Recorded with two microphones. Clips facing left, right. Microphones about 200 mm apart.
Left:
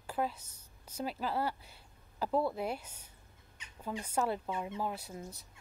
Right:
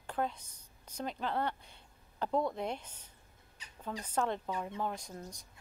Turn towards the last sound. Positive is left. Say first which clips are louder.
# left 1 dB
turn(degrees=5)  # may be behind; listen again after turning